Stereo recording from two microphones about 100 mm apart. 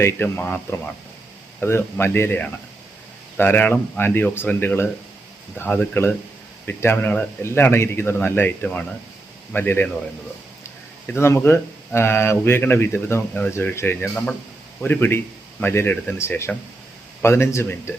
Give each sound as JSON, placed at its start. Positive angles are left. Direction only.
{"t": 0.0, "sound": "speech", "side_deg": 20}
{"t": 11.0, "sound": "speech", "side_deg": 25}